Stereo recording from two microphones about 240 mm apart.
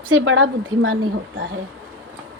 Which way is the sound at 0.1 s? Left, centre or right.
Right.